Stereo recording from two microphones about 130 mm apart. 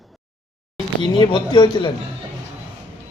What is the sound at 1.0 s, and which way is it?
Speech, 35° left (ahead or behind).